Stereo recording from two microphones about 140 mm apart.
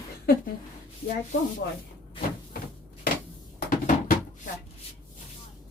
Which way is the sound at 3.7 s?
90° left.